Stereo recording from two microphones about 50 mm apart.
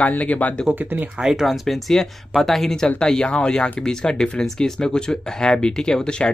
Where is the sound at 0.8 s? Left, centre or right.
Right.